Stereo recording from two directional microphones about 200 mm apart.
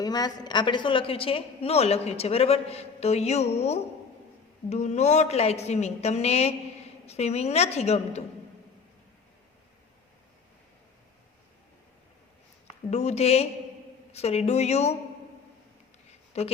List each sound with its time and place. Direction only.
0.0 s a woman's voice: 20° left (ahead or behind)
12.9 s a woman's voice: 35° left (ahead or behind)
16.3 s a woman's voice: 30° left (ahead or behind)